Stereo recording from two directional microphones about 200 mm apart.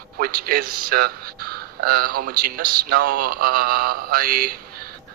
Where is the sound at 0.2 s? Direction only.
45° right (ahead or behind).